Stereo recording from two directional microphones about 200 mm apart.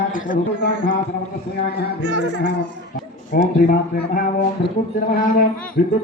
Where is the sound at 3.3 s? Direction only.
45° left (ahead or behind).